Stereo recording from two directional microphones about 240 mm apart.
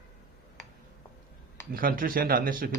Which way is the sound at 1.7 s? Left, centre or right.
Right.